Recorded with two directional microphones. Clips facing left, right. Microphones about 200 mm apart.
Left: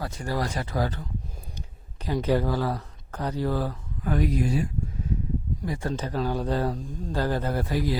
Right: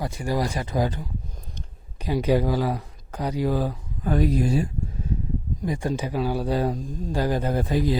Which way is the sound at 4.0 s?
30° right (ahead or behind).